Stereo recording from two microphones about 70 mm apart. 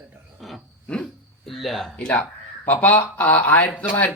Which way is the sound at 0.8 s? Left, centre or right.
Centre.